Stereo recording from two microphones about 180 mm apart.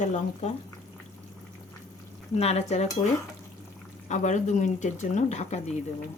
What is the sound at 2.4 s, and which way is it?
Speech, 35° left (ahead or behind).